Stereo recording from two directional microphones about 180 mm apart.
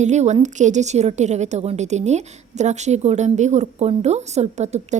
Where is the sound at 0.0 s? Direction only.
40° right (ahead or behind).